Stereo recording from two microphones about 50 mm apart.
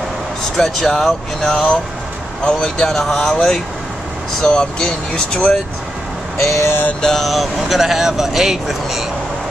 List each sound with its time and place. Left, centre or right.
0.6 s speech: centre
1.5 s speech: left
2.4 s speech: centre
6.4 s vehicle: left
7.0 s speech: centre
7.2 s speech: centre